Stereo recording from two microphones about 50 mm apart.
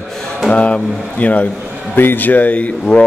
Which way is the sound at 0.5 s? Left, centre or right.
Left.